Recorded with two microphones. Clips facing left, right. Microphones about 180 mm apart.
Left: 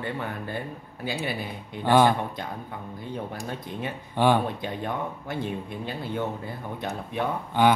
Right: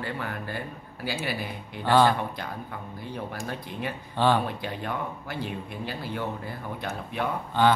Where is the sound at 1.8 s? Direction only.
15° left (ahead or behind).